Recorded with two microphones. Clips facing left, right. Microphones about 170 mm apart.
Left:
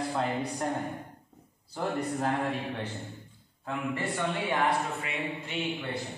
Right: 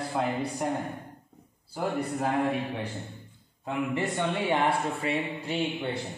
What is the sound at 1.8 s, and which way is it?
Speech, 10° right (ahead or behind).